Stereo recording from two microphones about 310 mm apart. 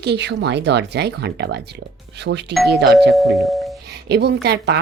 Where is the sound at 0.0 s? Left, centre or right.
Right.